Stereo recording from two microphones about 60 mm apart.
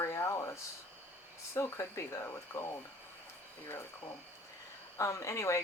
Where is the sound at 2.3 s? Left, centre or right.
Left.